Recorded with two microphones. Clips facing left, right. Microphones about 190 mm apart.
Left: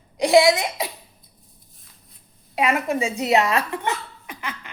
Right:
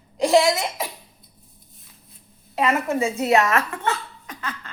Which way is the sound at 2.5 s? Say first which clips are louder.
Even; 15° left (ahead or behind).